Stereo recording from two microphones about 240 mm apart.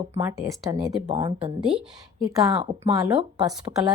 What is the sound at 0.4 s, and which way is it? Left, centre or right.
Speech, centre.